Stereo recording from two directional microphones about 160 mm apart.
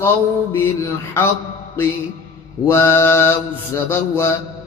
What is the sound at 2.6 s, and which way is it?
Mantra, 15° left (ahead or behind).